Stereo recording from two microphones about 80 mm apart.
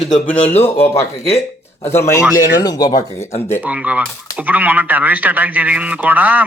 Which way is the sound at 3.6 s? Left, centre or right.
Centre.